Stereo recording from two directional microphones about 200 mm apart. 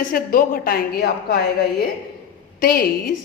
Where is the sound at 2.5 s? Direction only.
50° left (ahead or behind).